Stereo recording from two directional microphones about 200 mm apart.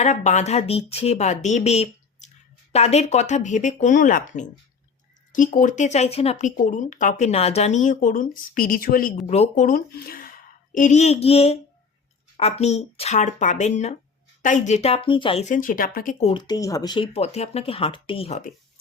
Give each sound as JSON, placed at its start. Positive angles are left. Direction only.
{"t": 0.0, "sound": "speech", "side_deg": 35}
{"t": 9.2, "sound": "a woman's voice", "side_deg": 35}
{"t": 16.2, "sound": "speech", "side_deg": 25}